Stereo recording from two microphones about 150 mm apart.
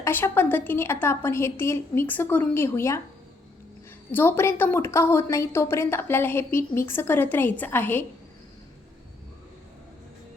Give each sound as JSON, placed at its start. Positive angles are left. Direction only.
{"t": 0.0, "sound": "a woman's voice", "side_deg": 15}
{"t": 4.1, "sound": "a woman's voice", "side_deg": 15}